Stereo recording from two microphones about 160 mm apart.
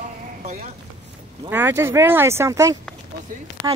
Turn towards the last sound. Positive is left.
turn(degrees=-25)  # may be behind; listen again after turning